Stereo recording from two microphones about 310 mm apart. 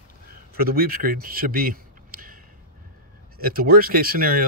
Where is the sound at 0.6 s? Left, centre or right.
Right.